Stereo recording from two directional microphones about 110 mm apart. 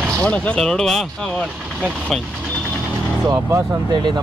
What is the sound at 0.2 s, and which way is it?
Speech, 10° left (ahead or behind).